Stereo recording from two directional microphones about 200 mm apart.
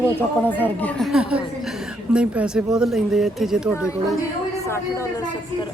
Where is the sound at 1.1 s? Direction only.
5° right (ahead or behind).